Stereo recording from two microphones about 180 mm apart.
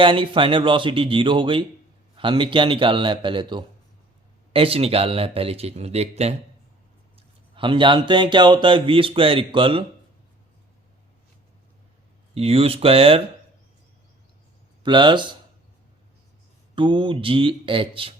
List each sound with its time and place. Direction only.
0.0 s speech: 30° right (ahead or behind)
12.3 s speech: 30° right (ahead or behind)
14.8 s speech: 25° right (ahead or behind)
16.7 s speech: 25° right (ahead or behind)